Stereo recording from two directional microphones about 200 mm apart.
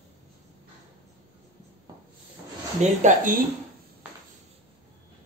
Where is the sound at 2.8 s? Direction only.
40° right (ahead or behind).